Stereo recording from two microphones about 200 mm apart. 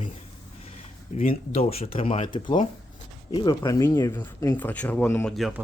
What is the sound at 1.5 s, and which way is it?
Speech, 30° left (ahead or behind).